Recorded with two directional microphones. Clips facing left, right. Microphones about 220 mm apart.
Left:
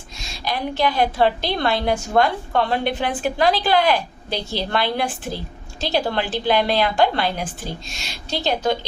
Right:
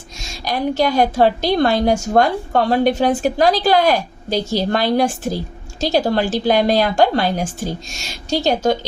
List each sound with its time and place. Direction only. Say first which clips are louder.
0.4 s a woman's voice: right 4 dB; 45° right (ahead or behind)